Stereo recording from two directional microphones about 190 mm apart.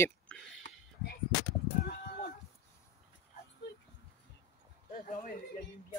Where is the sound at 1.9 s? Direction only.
50° left (ahead or behind).